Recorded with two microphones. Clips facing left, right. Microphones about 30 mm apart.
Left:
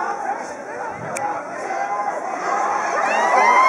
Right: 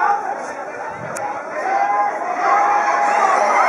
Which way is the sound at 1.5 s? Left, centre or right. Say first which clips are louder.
Right 6 dB; right.